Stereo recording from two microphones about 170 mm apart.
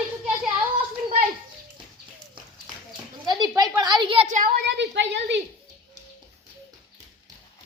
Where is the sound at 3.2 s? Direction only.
25° right (ahead or behind).